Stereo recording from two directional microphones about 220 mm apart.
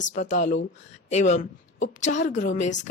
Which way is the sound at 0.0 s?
35° left (ahead or behind).